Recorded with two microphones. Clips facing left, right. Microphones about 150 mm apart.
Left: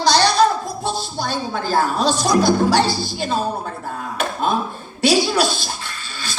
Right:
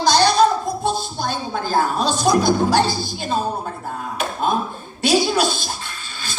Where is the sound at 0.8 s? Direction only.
50° right (ahead or behind).